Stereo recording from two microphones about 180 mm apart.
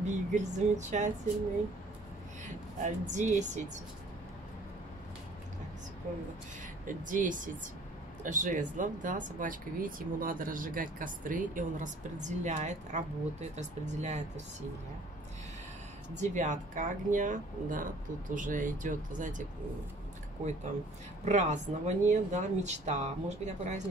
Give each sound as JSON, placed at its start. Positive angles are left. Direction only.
{"t": 0.0, "sound": "speech", "side_deg": -40}
{"t": 2.4, "sound": "speech", "side_deg": -40}
{"t": 6.9, "sound": "speech", "side_deg": -45}
{"t": 16.2, "sound": "speech", "side_deg": -45}
{"t": 21.3, "sound": "speech", "side_deg": -40}